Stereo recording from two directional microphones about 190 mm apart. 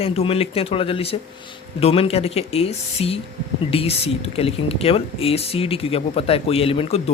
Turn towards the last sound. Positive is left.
turn(degrees=30)  # may be behind; listen again after turning